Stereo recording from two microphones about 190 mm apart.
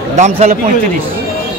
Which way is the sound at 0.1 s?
35° right (ahead or behind).